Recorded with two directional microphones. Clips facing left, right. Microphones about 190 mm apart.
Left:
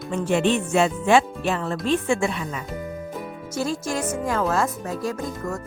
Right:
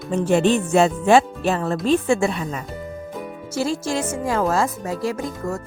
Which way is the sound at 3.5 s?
30° right (ahead or behind).